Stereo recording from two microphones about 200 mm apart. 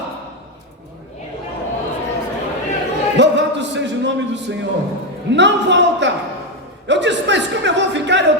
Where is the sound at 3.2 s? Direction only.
60° right (ahead or behind).